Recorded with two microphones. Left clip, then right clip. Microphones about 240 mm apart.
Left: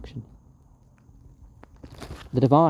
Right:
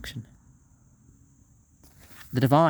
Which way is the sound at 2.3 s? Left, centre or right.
Right.